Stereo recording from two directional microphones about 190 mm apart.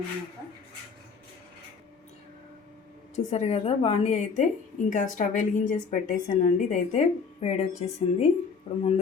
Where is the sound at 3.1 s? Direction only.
35° left (ahead or behind).